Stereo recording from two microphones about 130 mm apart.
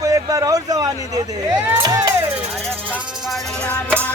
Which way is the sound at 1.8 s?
30° right (ahead or behind).